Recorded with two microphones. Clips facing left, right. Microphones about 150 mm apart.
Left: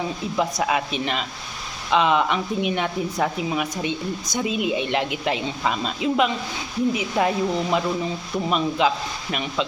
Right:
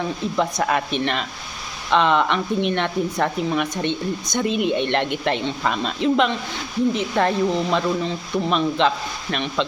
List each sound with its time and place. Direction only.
0.3 s speech: 5° left (ahead or behind)